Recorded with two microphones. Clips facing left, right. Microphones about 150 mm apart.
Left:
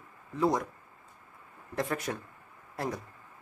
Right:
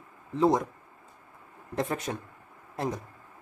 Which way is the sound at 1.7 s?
25° right (ahead or behind).